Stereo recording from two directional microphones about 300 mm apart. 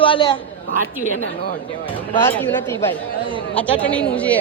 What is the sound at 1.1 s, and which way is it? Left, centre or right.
Speech, left.